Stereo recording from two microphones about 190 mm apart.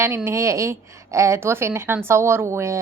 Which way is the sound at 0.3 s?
15° right (ahead or behind).